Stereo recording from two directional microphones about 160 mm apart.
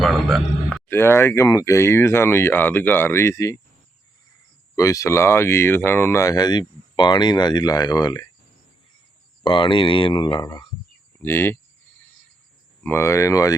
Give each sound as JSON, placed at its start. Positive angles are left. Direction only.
{"t": 0.0, "sound": "a man's voice", "side_deg": 0}
{"t": 0.9, "sound": "speech", "side_deg": 15}
{"t": 4.7, "sound": "speech", "side_deg": 20}
{"t": 9.4, "sound": "speech", "side_deg": 30}
{"t": 11.2, "sound": "speech", "side_deg": 15}
{"t": 12.8, "sound": "speech", "side_deg": 15}